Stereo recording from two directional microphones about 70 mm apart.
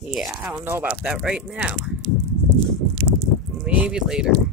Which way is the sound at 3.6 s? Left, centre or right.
Centre.